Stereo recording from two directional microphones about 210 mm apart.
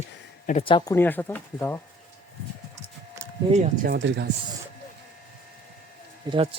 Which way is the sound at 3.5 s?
35° right (ahead or behind).